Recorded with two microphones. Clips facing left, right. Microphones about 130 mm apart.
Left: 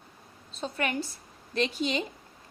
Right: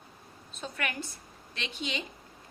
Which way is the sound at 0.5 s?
30° left (ahead or behind).